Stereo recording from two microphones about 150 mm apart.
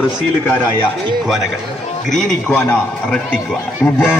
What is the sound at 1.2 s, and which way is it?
A man's voice, 5° right (ahead or behind).